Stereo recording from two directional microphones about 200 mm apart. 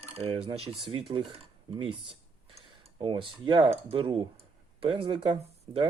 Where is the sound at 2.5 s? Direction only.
25° right (ahead or behind).